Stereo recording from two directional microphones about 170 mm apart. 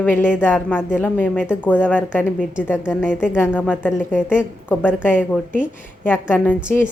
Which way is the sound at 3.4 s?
10° left (ahead or behind).